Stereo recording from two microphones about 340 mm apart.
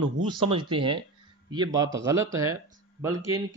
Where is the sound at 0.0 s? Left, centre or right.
Right.